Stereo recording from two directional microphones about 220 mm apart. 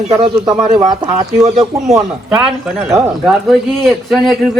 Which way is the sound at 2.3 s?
5° right (ahead or behind).